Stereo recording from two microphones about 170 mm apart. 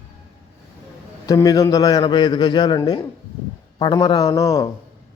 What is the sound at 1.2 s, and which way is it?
A man's voice, 20° left (ahead or behind).